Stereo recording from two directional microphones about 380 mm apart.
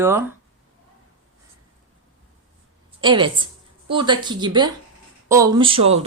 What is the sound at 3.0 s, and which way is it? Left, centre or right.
Speech, centre.